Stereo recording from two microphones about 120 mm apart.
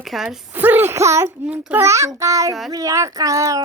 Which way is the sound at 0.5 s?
15° right (ahead or behind).